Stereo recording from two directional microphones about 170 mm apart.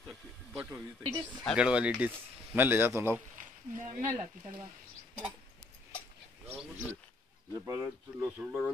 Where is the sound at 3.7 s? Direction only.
40° right (ahead or behind).